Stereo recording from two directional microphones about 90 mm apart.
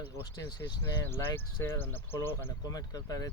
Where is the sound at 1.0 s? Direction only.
25° left (ahead or behind).